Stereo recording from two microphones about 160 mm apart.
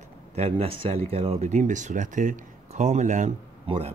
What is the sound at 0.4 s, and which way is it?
A man's voice, 40° right (ahead or behind).